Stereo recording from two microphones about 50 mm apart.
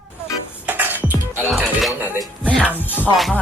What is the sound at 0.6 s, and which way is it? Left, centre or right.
Music, right.